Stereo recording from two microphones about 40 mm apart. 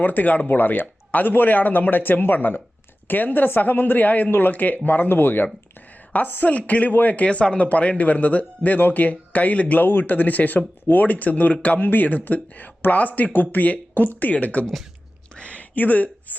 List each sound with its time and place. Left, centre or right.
0.0 s speech: left
4.3 s speech: left
6.1 s speech: left
14.3 s speech: left
15.4 s a sound: left
15.7 s speech: left